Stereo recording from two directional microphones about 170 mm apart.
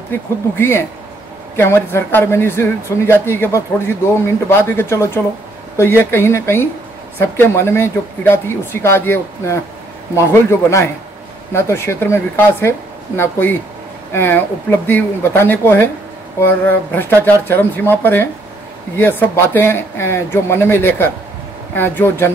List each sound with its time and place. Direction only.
0.1 s speech: 15° left (ahead or behind)